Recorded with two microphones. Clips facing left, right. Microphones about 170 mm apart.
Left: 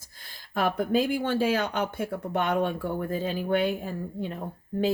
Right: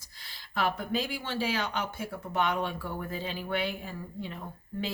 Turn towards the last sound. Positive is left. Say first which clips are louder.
# left 9 dB
turn(degrees=50)  # may be behind; listen again after turning